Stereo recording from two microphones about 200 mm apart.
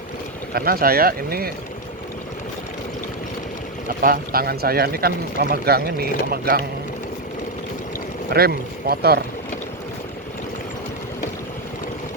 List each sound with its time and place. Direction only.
0.5 s speech: 50° right (ahead or behind)
3.8 s speech: 45° right (ahead or behind)
8.3 s speech: 50° right (ahead or behind)